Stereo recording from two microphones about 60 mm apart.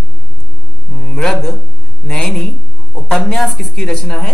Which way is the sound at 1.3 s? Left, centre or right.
Centre.